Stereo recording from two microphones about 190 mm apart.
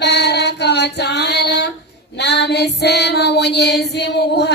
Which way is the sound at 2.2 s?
60° left (ahead or behind).